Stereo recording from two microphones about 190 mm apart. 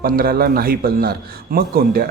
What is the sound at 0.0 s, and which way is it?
Speech, 50° right (ahead or behind).